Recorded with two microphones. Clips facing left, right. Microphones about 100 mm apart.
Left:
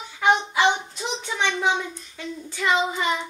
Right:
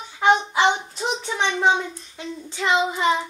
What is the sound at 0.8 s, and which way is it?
Hands, 40° right (ahead or behind).